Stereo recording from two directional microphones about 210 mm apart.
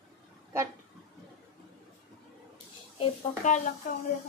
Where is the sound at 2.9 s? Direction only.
35° left (ahead or behind).